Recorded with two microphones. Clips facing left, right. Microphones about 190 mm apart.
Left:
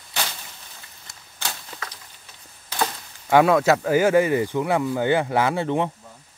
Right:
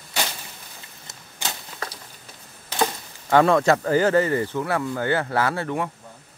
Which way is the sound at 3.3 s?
10° left (ahead or behind).